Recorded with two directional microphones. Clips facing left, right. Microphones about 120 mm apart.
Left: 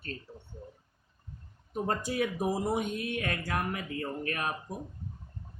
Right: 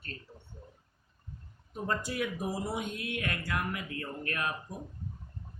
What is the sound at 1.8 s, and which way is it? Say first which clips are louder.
A man's voice: left 2 dB; 45° left (ahead or behind).